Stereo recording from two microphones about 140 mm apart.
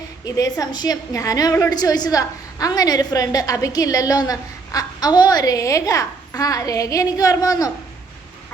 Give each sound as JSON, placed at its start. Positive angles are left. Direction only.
{"t": 0.3, "sound": "a woman's voice", "side_deg": 25}